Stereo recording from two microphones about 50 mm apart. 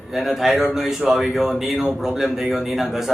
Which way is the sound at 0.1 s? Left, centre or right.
Centre.